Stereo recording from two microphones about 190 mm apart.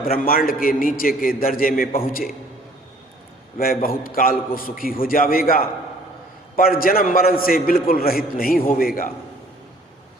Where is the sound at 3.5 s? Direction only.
50° left (ahead or behind).